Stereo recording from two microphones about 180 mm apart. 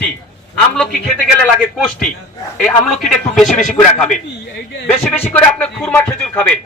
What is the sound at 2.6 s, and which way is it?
Speech, 5° left (ahead or behind).